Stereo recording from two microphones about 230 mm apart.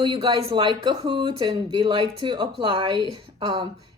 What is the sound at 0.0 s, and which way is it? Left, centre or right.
A woman's voice, centre.